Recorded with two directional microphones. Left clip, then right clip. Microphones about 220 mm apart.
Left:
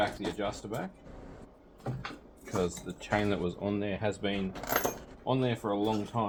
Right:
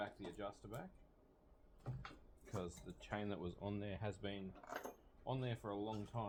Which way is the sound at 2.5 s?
40° right (ahead or behind).